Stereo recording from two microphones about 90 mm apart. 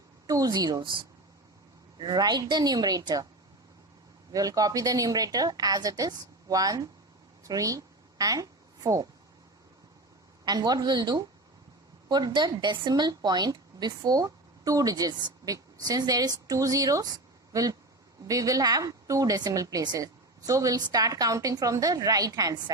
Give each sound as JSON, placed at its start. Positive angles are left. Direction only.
{"t": 0.3, "sound": "a woman's voice", "side_deg": -45}
{"t": 2.0, "sound": "a woman's voice", "side_deg": -50}
{"t": 4.3, "sound": "a woman's voice", "side_deg": -40}
{"t": 7.4, "sound": "a sound", "side_deg": -40}
{"t": 10.4, "sound": "a woman's voice", "side_deg": -50}